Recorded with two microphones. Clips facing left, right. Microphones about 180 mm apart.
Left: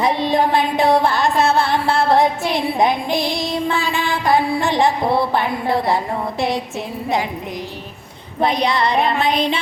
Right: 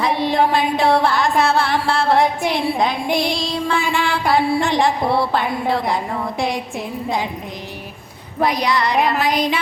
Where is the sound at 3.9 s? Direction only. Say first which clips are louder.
Left 1 dB; 20° left (ahead or behind).